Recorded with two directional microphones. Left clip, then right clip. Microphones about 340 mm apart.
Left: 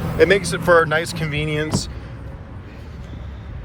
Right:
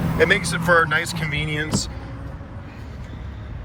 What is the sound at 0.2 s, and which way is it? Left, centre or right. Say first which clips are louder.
Speech: left 3 dB; centre.